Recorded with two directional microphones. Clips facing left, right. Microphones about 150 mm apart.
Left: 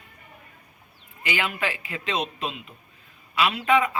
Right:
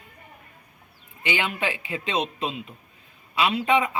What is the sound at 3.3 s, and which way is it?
Speech, 25° right (ahead or behind).